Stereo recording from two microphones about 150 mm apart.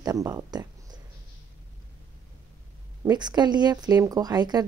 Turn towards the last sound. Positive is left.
turn(degrees=-25)  # may be behind; listen again after turning